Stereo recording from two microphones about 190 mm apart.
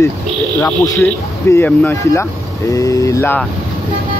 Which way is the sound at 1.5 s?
10° left (ahead or behind).